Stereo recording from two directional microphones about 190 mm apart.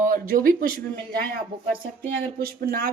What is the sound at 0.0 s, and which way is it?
Speech, 45° right (ahead or behind).